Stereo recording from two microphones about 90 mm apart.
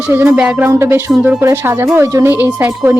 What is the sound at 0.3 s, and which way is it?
Speech, 15° right (ahead or behind).